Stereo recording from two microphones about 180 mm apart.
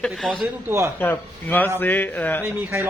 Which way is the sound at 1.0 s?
10° left (ahead or behind).